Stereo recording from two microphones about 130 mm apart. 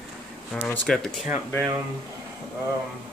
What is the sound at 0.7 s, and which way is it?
Speech, 5° left (ahead or behind).